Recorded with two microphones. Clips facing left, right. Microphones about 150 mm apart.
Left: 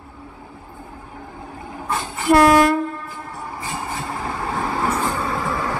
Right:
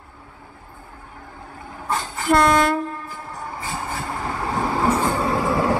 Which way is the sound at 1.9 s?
10° left (ahead or behind).